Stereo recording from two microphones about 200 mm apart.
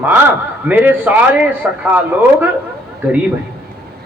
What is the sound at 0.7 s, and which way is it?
A man's voice, 10° right (ahead or behind).